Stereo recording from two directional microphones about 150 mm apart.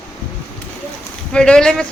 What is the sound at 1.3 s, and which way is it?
Speech, 5° left (ahead or behind).